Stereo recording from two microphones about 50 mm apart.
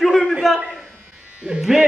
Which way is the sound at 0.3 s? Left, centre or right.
Centre.